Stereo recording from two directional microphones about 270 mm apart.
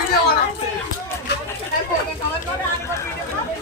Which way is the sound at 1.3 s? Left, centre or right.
Left.